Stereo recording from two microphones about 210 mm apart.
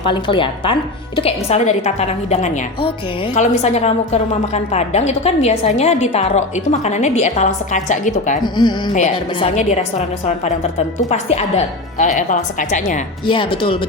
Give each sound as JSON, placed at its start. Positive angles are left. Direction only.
{"t": 0.0, "sound": "a woman's voice", "side_deg": 25}
{"t": 13.2, "sound": "speech", "side_deg": 25}